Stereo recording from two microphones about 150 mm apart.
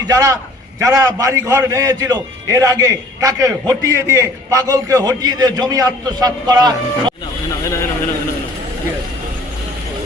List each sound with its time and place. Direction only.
0.1 s a man's voice: 20° right (ahead or behind)